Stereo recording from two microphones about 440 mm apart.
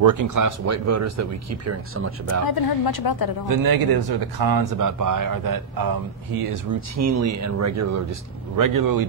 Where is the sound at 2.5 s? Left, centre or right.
Left.